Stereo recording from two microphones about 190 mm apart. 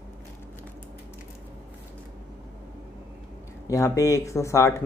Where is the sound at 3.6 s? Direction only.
15° left (ahead or behind).